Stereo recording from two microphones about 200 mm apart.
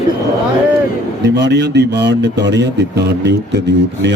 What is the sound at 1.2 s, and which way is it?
Speech, 60° right (ahead or behind).